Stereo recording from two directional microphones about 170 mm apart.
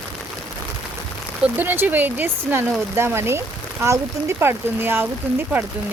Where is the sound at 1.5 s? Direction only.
10° right (ahead or behind).